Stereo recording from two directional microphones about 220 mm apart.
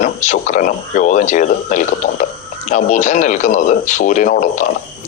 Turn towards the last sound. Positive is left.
turn(degrees=35)  # may be behind; listen again after turning